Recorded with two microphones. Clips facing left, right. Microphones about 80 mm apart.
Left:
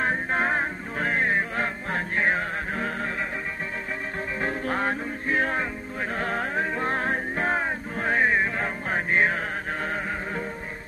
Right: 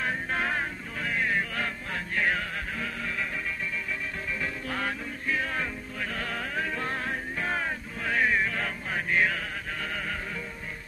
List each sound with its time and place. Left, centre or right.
0.0 s music: left
4.4 s music: left